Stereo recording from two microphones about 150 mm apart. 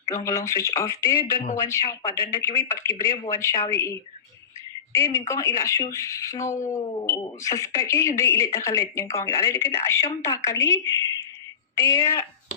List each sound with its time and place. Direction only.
0.1 s a woman's voice: 20° left (ahead or behind)
4.9 s a woman's voice: 20° left (ahead or behind)